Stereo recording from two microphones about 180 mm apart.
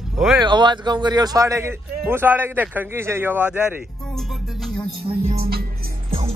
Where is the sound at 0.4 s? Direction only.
25° right (ahead or behind).